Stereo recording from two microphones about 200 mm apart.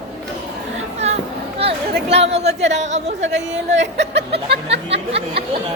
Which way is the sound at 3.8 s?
60° right (ahead or behind).